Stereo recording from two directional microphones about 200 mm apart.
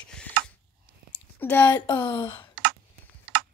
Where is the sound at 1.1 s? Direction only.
10° left (ahead or behind).